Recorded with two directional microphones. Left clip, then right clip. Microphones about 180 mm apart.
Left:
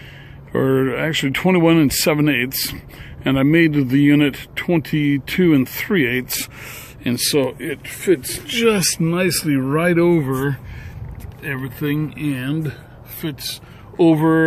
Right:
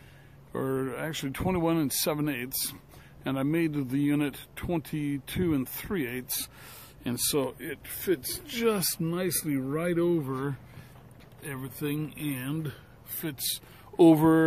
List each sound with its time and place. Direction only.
0.5 s speech: 10° left (ahead or behind)
7.0 s speech: 10° right (ahead or behind)
8.5 s speech: 15° right (ahead or behind)
9.0 s speech: centre (ahead or behind)
11.4 s speech: 10° right (ahead or behind)
12.3 s speech: 30° right (ahead or behind)
13.2 s speech: 45° right (ahead or behind)